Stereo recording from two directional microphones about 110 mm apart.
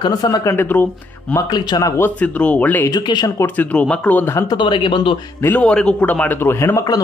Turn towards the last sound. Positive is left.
turn(degrees=25)  # may be behind; listen again after turning